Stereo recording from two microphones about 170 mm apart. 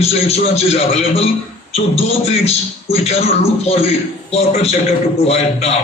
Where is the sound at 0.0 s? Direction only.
35° left (ahead or behind).